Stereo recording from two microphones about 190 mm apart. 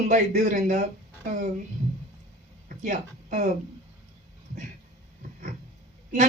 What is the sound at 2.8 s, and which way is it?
Speech, 45° right (ahead or behind).